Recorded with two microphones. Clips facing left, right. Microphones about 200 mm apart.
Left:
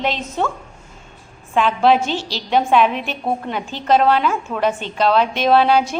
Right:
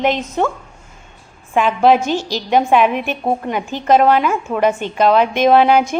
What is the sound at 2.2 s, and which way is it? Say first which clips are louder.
Speech: right 5 dB; 45° right (ahead or behind).